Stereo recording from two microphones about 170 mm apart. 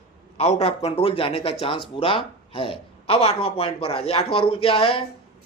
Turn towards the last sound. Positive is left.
turn(degrees=35)  # may be behind; listen again after turning